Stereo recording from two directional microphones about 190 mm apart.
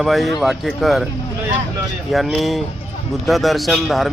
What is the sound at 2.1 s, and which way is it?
A man's voice, centre (ahead or behind).